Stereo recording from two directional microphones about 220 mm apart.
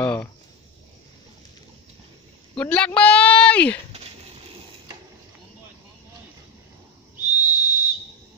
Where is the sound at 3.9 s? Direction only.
30° right (ahead or behind).